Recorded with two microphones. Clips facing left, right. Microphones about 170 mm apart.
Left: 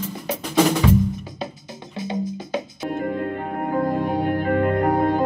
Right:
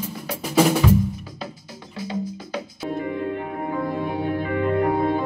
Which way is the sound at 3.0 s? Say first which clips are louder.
Left 1 dB; 45° left (ahead or behind).